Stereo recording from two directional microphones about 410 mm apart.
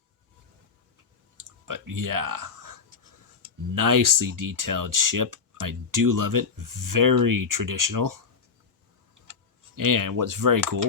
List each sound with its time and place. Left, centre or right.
1.4 s clicking: right
3.4 s speech: right
9.7 s speech: right